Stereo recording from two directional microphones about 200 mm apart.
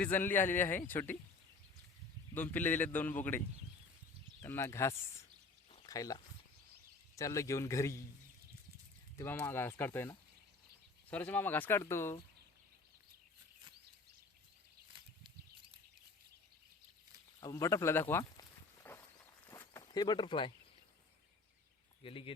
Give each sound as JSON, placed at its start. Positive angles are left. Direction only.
{"t": 0.0, "sound": "a man's voice", "side_deg": 10}
{"t": 2.3, "sound": "a man's voice", "side_deg": 10}
{"t": 4.4, "sound": "a man's voice", "side_deg": 15}
{"t": 5.7, "sound": "a sound", "side_deg": 15}
{"t": 7.2, "sound": "a man's voice", "side_deg": 15}
{"t": 9.1, "sound": "a man's voice", "side_deg": 10}
{"t": 17.4, "sound": "a sound", "side_deg": 15}
{"t": 22.0, "sound": "speech", "side_deg": 25}